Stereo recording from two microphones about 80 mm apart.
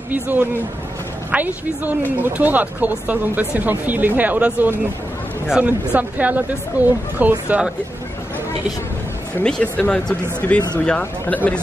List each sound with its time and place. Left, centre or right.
0.1 s speech: right
9.4 s speech: centre